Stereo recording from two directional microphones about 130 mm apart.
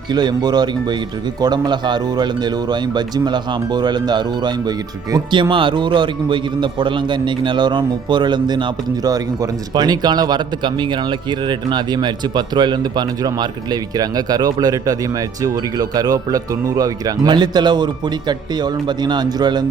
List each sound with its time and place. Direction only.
0.1 s speech: 35° right (ahead or behind)